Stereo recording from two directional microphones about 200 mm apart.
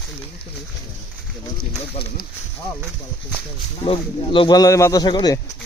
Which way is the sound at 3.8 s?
25° left (ahead or behind).